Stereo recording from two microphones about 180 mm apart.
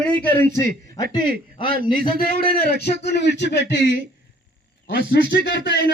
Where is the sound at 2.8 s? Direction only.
65° left (ahead or behind).